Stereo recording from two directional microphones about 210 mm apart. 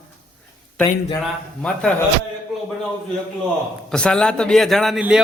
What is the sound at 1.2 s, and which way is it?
Speech, centre (ahead or behind).